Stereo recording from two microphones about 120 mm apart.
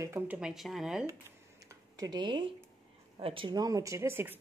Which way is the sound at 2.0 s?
35° right (ahead or behind).